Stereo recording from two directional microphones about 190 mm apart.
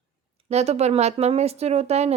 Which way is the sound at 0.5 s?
35° right (ahead or behind).